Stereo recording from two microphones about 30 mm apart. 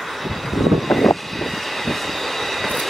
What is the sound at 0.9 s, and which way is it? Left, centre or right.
Vehicle, centre.